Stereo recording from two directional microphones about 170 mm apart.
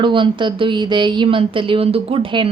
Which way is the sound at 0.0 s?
30° right (ahead or behind).